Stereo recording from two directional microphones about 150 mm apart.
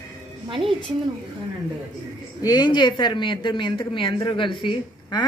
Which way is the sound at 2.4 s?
25° left (ahead or behind).